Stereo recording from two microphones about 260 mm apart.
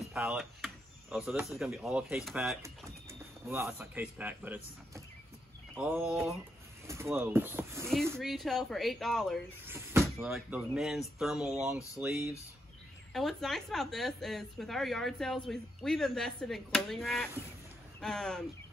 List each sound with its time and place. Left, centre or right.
0.1 s speech: centre
5.8 s speech: centre